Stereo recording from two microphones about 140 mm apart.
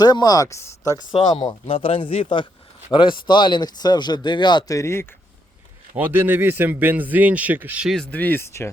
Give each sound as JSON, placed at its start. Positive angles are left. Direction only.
{"t": 0.0, "sound": "speech", "side_deg": 30}
{"t": 1.4, "sound": "speech", "side_deg": 40}
{"t": 6.0, "sound": "a man's voice", "side_deg": -15}
{"t": 8.1, "sound": "speech", "side_deg": 10}